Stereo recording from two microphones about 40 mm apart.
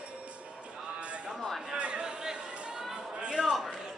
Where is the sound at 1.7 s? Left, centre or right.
Right.